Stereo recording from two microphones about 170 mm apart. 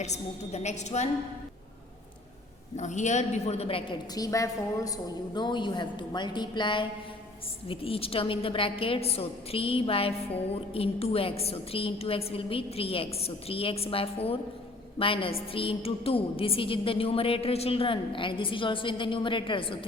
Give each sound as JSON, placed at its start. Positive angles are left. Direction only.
{"t": 0.0, "sound": "a woman's voice", "side_deg": 40}
{"t": 2.7, "sound": "a woman's voice", "side_deg": 45}